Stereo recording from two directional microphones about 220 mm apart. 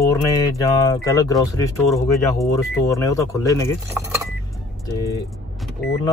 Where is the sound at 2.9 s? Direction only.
15° left (ahead or behind).